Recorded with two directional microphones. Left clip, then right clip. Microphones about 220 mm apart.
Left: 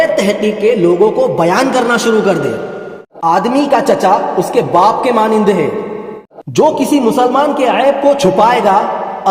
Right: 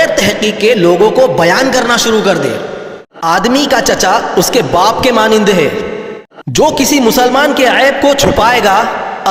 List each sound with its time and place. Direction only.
0.0 s a man's voice: 15° right (ahead or behind)
3.2 s a man's voice: 20° right (ahead or behind)
6.6 s a man's voice: 20° right (ahead or behind)